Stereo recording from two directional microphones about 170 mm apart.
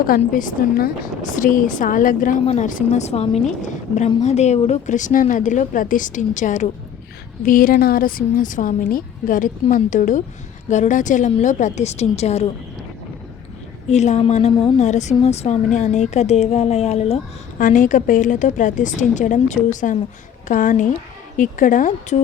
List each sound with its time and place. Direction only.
0.2 s a woman's voice: 50° left (ahead or behind)
13.9 s a woman's voice: 40° left (ahead or behind)
17.6 s a woman's voice: 50° left (ahead or behind)